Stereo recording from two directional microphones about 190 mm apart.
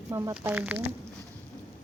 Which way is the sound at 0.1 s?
15° right (ahead or behind).